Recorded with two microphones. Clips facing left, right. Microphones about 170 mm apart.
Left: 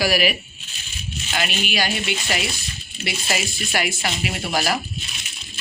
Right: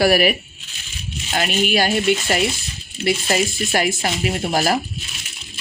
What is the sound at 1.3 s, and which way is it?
Speech, 40° right (ahead or behind).